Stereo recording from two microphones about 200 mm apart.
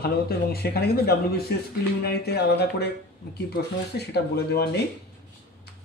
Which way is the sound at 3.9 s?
55° left (ahead or behind).